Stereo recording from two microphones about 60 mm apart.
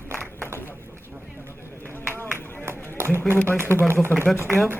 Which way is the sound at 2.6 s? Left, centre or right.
Right.